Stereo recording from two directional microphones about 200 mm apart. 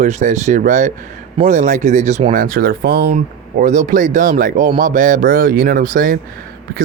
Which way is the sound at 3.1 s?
35° right (ahead or behind).